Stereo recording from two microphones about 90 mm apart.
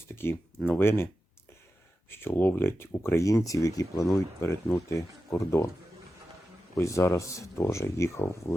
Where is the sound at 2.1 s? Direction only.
25° left (ahead or behind).